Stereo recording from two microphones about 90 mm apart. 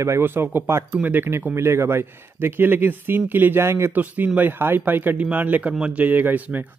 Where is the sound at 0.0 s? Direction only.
30° right (ahead or behind).